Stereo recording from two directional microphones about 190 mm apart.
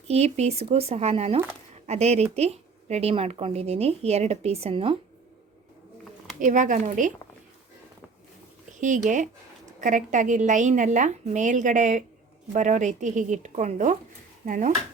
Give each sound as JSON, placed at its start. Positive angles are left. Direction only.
{"t": 0.1, "sound": "speech", "side_deg": -35}
{"t": 6.4, "sound": "a woman's voice", "side_deg": -40}
{"t": 8.8, "sound": "speech", "side_deg": -40}